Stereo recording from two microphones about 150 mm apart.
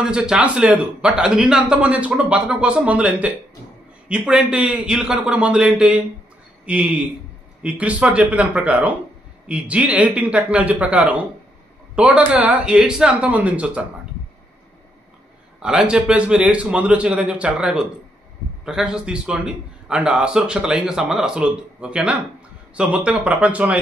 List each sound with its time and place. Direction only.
0.0 s a man's voice: 5° right (ahead or behind)
15.6 s a man's voice: 5° right (ahead or behind)